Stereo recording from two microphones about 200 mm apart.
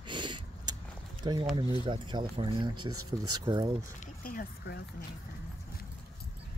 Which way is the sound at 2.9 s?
90° right.